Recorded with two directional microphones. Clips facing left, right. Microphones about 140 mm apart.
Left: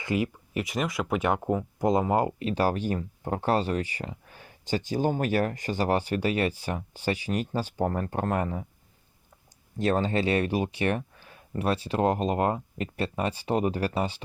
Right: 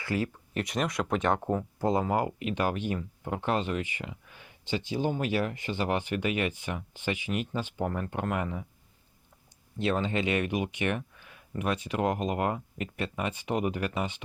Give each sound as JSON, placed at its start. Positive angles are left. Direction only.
{"t": 0.0, "sound": "speech", "side_deg": 20}
{"t": 0.5, "sound": "speech", "side_deg": 0}
{"t": 1.8, "sound": "speech", "side_deg": 20}
{"t": 9.7, "sound": "speech", "side_deg": 40}